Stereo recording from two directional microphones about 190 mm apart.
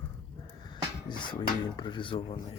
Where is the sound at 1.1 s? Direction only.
25° left (ahead or behind).